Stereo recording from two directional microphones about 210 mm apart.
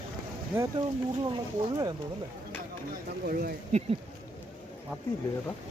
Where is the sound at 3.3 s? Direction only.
50° right (ahead or behind).